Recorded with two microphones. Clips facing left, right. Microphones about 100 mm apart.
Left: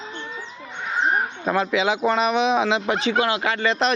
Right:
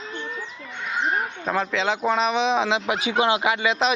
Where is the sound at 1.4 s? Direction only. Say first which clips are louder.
Left 3 dB; 5° left (ahead or behind).